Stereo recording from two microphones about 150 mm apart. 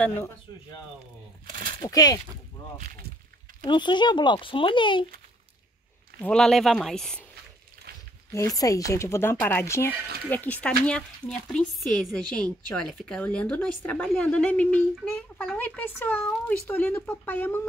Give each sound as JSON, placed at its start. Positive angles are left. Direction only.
{"t": 1.4, "sound": "a sound", "side_deg": -70}
{"t": 1.8, "sound": "speech", "side_deg": 25}
{"t": 3.6, "sound": "speech", "side_deg": 30}
{"t": 6.2, "sound": "speech", "side_deg": 5}
{"t": 7.9, "sound": "a sound", "side_deg": -90}
{"t": 8.3, "sound": "speech", "side_deg": 20}